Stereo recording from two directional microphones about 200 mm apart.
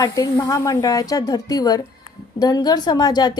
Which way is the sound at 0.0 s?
20° left (ahead or behind).